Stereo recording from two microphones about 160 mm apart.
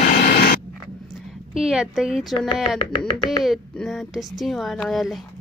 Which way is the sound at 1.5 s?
5° right (ahead or behind).